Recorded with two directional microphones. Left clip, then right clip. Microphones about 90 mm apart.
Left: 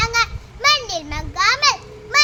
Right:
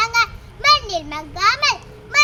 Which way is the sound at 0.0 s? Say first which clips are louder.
Right 1 dB; 35° left (ahead or behind).